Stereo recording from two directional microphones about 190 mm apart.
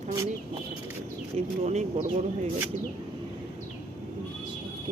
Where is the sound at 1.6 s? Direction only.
35° right (ahead or behind).